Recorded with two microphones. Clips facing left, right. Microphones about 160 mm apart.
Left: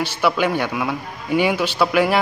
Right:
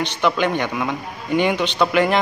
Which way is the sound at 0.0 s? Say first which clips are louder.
Even; 10° left (ahead or behind).